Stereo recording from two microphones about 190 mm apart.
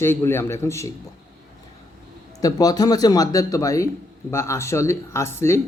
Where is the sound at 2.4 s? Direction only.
20° left (ahead or behind).